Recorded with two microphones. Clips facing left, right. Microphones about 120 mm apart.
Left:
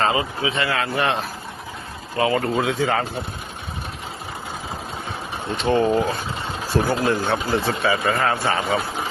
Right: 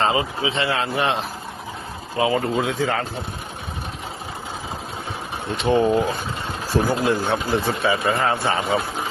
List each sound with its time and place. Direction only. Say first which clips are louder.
0.0 s speech: even; 25° right (ahead or behind)
2.4 s speech: left 1 dB; centre (ahead or behind)
5.6 s speech: right 1 dB; 10° right (ahead or behind)
7.9 s speech: even; 25° right (ahead or behind)